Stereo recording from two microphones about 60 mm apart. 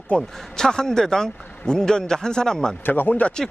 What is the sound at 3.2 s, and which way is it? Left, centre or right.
Speech, centre.